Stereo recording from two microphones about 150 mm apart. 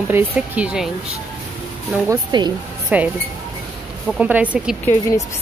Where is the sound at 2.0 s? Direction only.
25° right (ahead or behind).